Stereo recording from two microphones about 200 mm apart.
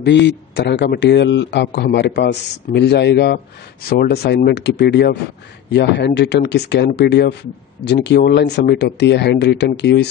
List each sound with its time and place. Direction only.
0.0 s speech: 60° left (ahead or behind)